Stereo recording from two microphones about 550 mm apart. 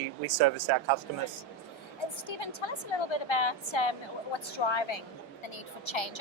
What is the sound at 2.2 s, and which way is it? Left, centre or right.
A woman's voice, left.